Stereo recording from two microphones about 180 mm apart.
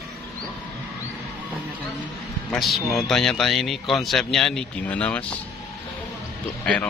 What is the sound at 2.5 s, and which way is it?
Speech, centre (ahead or behind).